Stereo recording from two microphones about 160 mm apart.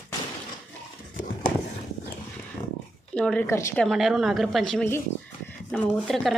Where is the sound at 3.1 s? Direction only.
5° left (ahead or behind).